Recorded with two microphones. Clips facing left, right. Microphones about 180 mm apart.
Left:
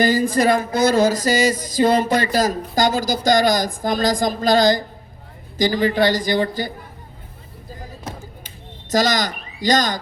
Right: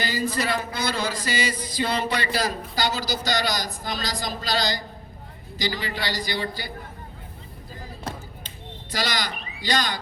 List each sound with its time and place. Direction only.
0.0 s speech: 45° left (ahead or behind)
8.9 s speech: 45° left (ahead or behind)